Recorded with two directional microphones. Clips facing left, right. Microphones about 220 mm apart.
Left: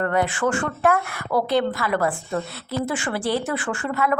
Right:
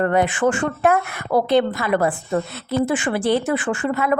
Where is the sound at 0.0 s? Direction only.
25° right (ahead or behind).